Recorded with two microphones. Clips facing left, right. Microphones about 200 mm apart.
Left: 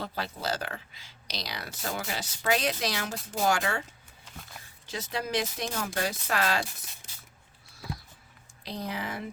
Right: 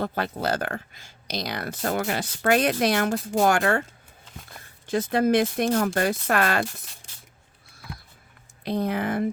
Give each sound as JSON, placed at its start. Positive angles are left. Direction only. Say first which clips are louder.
{"t": 0.0, "sound": "speech", "louder": "right 7 dB", "side_deg": -55}
{"t": 8.6, "sound": "speech", "louder": "right 10 dB", "side_deg": -55}